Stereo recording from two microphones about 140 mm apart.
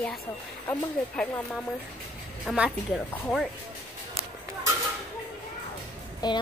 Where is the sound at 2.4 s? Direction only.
5° right (ahead or behind).